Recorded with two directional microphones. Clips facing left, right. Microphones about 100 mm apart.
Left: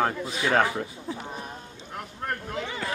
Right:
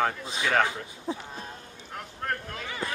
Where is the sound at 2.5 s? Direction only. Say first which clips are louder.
Left 3 dB; 25° left (ahead or behind).